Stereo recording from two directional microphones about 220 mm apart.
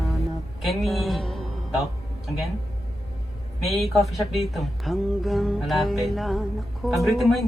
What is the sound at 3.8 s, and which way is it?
Speech, centre (ahead or behind).